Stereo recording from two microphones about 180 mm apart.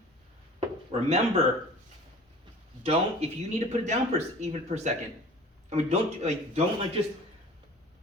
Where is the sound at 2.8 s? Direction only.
35° right (ahead or behind).